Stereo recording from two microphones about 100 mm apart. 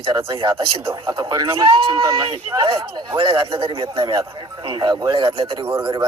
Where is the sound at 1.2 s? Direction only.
30° right (ahead or behind).